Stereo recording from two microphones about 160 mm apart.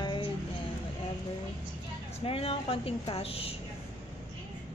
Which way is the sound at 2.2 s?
35° left (ahead or behind).